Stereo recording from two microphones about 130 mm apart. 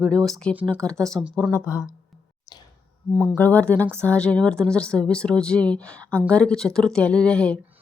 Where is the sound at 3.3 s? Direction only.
15° left (ahead or behind).